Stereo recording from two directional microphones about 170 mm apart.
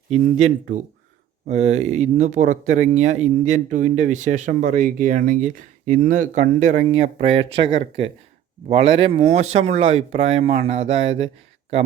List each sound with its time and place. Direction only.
0.1 s speech: 40° right (ahead or behind)